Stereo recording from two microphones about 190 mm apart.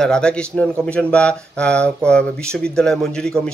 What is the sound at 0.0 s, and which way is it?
Speech, 5° left (ahead or behind).